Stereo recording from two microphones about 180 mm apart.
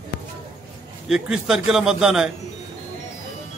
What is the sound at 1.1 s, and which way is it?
A man's voice, centre (ahead or behind).